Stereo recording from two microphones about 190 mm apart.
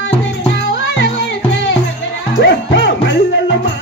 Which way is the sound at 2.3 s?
70° left (ahead or behind).